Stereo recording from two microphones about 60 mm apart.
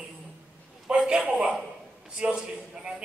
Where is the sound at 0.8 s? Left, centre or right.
Centre.